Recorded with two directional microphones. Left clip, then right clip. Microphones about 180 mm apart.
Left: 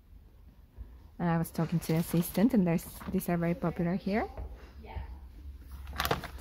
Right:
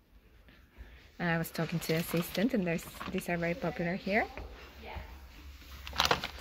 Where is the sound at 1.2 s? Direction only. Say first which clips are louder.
Even; 20° left (ahead or behind).